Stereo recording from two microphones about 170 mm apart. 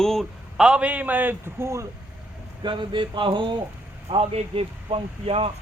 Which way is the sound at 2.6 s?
25° right (ahead or behind).